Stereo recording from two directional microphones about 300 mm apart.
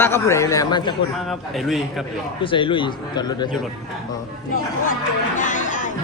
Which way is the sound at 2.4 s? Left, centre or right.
Centre.